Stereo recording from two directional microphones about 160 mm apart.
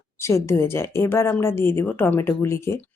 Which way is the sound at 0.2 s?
15° left (ahead or behind).